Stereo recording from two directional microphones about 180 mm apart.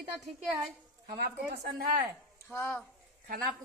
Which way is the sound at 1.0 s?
60° right (ahead or behind).